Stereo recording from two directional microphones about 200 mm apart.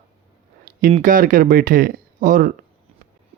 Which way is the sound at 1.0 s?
45° right (ahead or behind).